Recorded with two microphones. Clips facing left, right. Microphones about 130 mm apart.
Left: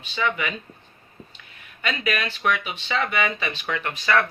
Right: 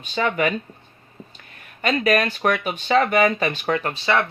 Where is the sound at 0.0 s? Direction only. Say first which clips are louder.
Right 5 dB; 45° right (ahead or behind).